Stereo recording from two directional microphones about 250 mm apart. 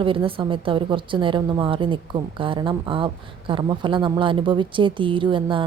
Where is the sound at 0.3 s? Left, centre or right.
Right.